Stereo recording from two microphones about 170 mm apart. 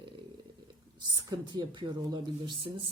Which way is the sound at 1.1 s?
25° right (ahead or behind).